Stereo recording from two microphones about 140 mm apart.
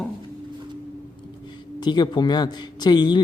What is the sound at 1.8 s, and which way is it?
Speech, 30° left (ahead or behind).